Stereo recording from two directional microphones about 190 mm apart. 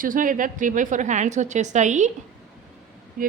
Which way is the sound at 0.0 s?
45° right (ahead or behind).